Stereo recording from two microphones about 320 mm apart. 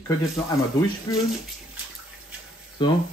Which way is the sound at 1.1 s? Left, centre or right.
Centre.